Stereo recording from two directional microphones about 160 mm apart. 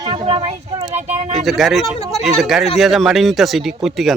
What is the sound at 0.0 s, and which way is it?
Speech, 35° right (ahead or behind).